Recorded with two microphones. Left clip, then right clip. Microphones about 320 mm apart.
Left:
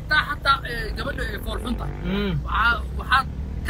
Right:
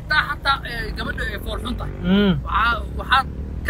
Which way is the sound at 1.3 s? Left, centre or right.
Centre.